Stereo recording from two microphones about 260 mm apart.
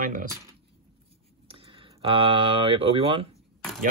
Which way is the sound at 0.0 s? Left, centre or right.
Right.